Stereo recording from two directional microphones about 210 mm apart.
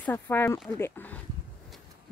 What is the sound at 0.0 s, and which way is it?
Speech, 10° left (ahead or behind).